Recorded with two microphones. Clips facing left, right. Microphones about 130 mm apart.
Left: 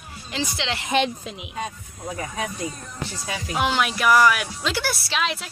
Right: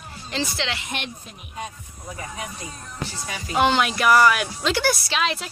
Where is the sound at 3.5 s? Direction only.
5° left (ahead or behind).